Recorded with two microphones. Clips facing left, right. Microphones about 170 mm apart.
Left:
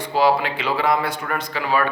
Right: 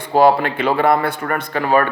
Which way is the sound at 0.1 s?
50° right (ahead or behind).